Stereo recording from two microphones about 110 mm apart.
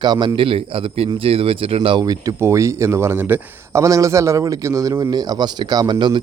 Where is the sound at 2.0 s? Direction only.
35° right (ahead or behind).